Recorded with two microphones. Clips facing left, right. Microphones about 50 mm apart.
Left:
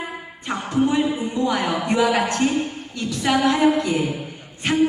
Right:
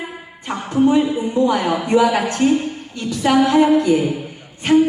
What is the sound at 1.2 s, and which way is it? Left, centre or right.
Music, right.